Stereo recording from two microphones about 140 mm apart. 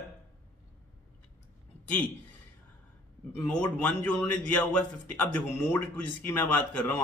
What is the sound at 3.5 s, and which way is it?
Speech, 10° left (ahead or behind).